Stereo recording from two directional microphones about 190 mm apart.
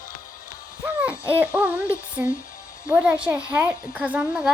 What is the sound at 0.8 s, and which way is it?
Hoot, 10° right (ahead or behind).